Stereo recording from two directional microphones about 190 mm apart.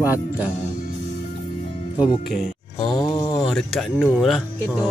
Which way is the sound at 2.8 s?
20° left (ahead or behind).